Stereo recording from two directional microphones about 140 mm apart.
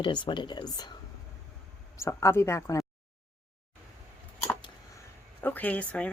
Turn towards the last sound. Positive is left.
turn(degrees=10)  # may be behind; listen again after turning